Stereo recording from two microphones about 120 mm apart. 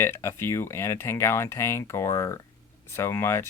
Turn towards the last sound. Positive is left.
turn(degrees=20)  # may be behind; listen again after turning